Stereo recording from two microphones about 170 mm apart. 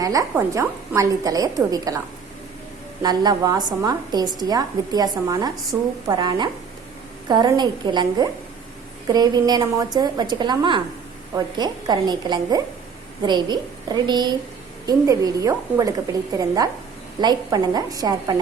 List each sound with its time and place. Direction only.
0.0 s a woman's voice: 20° right (ahead or behind)
3.0 s a woman's voice: 25° right (ahead or behind)
17.2 s a woman's voice: 25° right (ahead or behind)